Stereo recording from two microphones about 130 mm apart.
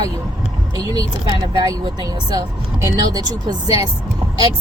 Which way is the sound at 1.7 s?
35° right (ahead or behind).